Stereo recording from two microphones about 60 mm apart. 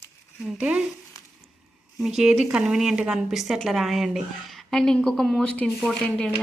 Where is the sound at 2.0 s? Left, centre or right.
Centre.